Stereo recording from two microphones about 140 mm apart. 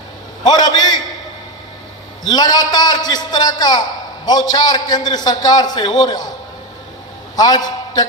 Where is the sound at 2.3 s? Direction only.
30° left (ahead or behind).